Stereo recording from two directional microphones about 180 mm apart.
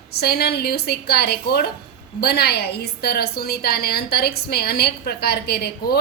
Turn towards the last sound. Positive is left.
turn(degrees=60)  # may be behind; listen again after turning